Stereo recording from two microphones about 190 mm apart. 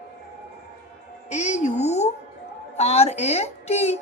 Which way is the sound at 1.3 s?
40° left (ahead or behind).